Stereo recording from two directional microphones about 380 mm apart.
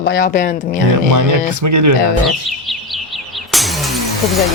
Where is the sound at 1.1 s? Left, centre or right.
Right.